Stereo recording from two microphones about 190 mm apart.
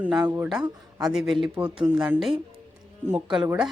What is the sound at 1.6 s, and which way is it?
Speech, 30° right (ahead or behind).